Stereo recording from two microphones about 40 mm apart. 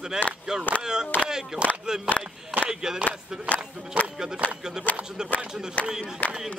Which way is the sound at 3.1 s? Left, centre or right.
Left.